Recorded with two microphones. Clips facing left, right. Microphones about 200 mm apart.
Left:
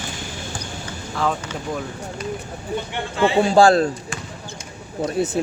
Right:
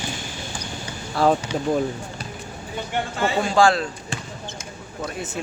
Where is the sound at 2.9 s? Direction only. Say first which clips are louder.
Left 3 dB; 45° right (ahead or behind).